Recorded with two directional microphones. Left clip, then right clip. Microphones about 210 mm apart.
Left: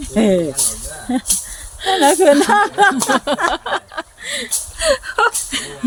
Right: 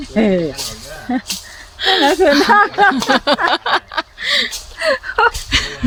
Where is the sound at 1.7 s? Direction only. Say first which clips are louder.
Right 3 dB; 30° right (ahead or behind).